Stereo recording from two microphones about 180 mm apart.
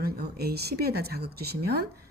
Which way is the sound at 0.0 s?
60° right (ahead or behind).